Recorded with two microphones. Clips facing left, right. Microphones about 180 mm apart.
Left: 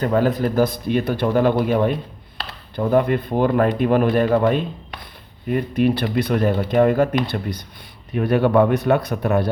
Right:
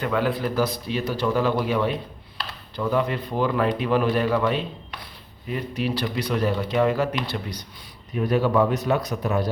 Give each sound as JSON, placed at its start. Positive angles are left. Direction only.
{"t": 0.0, "sound": "a man's voice", "side_deg": 45}